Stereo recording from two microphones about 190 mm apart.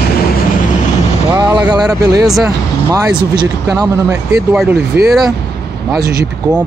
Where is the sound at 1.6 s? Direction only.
20° right (ahead or behind).